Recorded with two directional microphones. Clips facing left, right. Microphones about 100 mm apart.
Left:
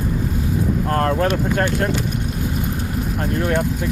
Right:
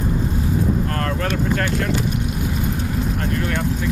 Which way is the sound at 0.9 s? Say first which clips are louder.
Left 4 dB; 35° left (ahead or behind).